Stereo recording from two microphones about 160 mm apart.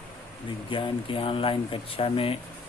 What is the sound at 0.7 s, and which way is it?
Speech, 30° left (ahead or behind).